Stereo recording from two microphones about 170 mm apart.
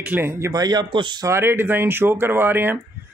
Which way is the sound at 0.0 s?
10° right (ahead or behind).